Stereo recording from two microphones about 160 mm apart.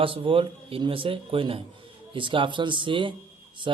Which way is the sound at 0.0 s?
35° right (ahead or behind).